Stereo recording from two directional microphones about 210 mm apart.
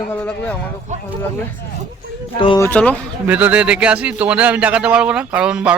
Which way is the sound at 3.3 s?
5° right (ahead or behind).